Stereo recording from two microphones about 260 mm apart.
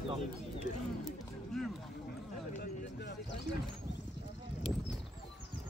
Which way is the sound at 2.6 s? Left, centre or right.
Left.